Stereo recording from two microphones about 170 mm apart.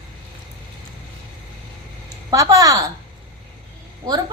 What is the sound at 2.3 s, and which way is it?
Speech, 20° right (ahead or behind).